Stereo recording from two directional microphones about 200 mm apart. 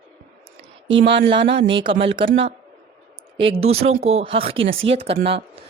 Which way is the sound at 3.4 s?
30° right (ahead or behind).